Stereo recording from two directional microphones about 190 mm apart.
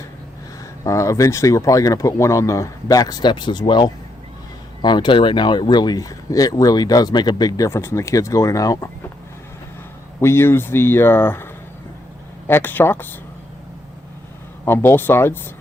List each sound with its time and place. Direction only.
0.9 s speech: 15° left (ahead or behind)
10.2 s speech: 15° left (ahead or behind)
12.5 s speech: 10° left (ahead or behind)
14.6 s speech: 10° left (ahead or behind)